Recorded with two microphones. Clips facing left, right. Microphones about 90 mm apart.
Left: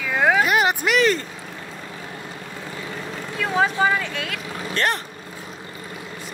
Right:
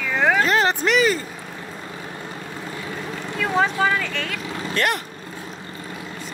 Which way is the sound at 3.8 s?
15° left (ahead or behind).